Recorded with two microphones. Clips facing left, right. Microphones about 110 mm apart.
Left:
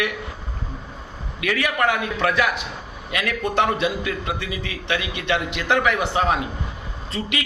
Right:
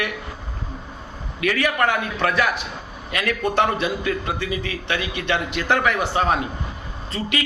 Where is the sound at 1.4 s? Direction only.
10° left (ahead or behind).